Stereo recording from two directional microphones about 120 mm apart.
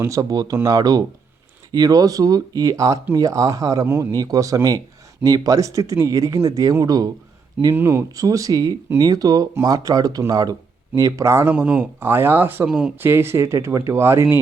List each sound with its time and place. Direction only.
0.0 s speech: 30° right (ahead or behind)
7.7 s speech: 20° right (ahead or behind)